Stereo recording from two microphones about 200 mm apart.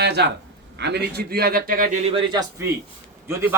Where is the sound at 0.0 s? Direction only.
60° right (ahead or behind).